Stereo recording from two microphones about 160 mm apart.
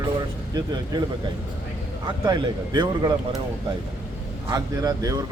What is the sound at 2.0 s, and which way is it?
A man's voice, 25° right (ahead or behind).